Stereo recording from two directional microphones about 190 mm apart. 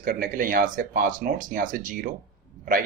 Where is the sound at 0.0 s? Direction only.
45° right (ahead or behind).